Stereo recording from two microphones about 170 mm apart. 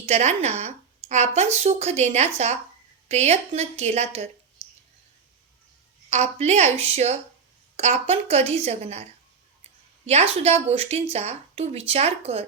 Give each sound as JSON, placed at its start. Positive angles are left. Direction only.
{"t": 0.0, "sound": "a woman's voice", "side_deg": -40}
{"t": 4.6, "sound": "clicking", "side_deg": -40}
{"t": 6.1, "sound": "a woman's voice", "side_deg": -40}
{"t": 10.1, "sound": "a woman's voice", "side_deg": -35}